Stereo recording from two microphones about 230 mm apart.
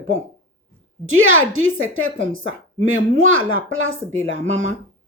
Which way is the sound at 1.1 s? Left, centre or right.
Right.